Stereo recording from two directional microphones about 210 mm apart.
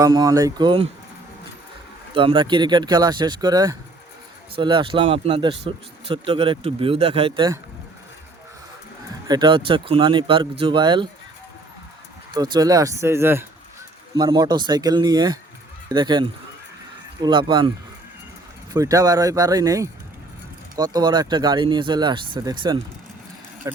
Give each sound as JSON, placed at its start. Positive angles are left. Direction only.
{"t": 0.0, "sound": "speech", "side_deg": -15}
{"t": 2.1, "sound": "speech", "side_deg": -25}
{"t": 9.2, "sound": "speech", "side_deg": -20}
{"t": 12.3, "sound": "speech", "side_deg": -20}
{"t": 18.7, "sound": "speech", "side_deg": -15}